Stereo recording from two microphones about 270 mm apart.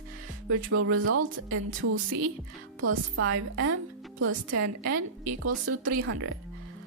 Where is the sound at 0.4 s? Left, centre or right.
Right.